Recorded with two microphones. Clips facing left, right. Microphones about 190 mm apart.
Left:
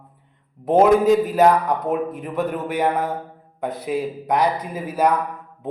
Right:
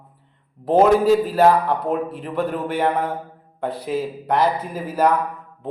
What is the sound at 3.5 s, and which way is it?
Speech, 15° left (ahead or behind).